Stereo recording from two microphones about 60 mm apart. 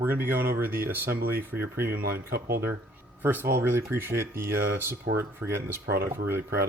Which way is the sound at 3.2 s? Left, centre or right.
Right.